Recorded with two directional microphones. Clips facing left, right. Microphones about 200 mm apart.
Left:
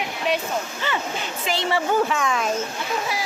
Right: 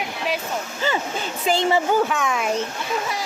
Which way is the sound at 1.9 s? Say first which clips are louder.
Right 1 dB; centre (ahead or behind).